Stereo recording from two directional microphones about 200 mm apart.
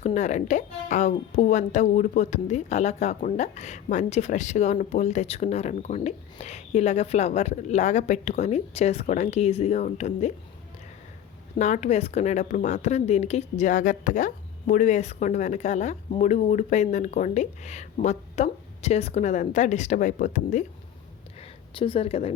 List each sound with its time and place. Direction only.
0.0 s a woman's voice: 35° left (ahead or behind)
11.5 s a woman's voice: 35° left (ahead or behind)
21.8 s speech: 25° left (ahead or behind)